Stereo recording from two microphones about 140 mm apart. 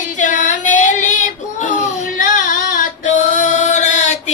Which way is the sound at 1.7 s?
75° left (ahead or behind).